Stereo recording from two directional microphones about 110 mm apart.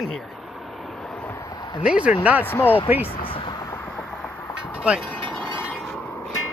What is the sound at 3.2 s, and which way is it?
Vehicle, 55° left (ahead or behind).